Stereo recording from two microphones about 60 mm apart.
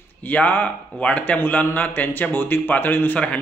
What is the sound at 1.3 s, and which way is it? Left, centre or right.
A man's voice, left.